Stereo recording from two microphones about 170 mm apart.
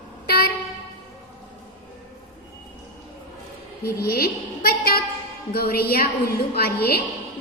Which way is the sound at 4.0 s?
65° left (ahead or behind).